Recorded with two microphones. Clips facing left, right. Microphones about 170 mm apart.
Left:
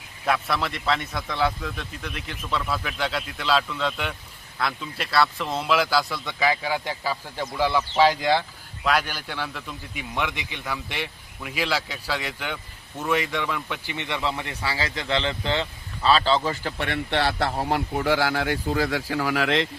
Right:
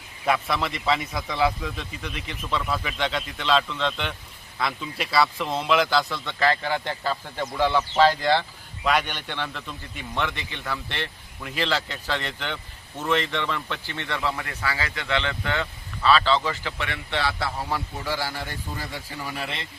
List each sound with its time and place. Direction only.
0.3 s a man's voice: centre (ahead or behind); by 16.7 s 35° left (ahead or behind)
16.7 s speech: 55° left (ahead or behind); by 19.6 s 90° left